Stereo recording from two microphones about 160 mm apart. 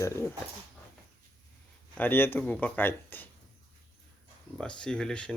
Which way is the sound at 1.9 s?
10° left (ahead or behind).